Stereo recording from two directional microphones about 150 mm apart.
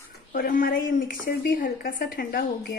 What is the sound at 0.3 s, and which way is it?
A woman's voice, 65° left (ahead or behind).